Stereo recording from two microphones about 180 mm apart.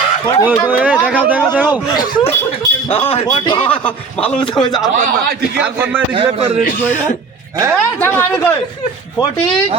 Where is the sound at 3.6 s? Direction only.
10° left (ahead or behind).